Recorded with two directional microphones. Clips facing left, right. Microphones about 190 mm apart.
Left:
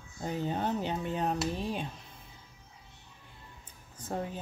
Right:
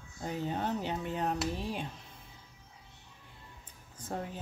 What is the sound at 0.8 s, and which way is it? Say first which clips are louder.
Speech: left 2 dB; 25° left (ahead or behind).